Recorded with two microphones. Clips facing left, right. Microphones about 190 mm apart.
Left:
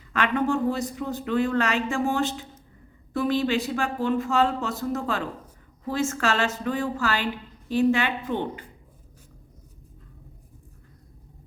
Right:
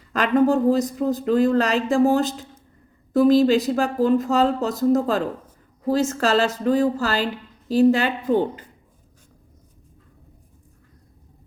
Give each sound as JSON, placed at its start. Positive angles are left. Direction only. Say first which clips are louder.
{"t": 0.1, "sound": "speech", "louder": "right 6 dB", "side_deg": -35}